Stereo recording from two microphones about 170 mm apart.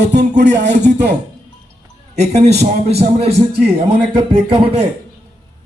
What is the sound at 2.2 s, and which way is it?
A man's voice, 40° right (ahead or behind).